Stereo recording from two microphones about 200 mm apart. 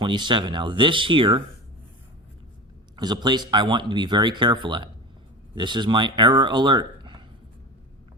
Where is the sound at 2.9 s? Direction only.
20° right (ahead or behind).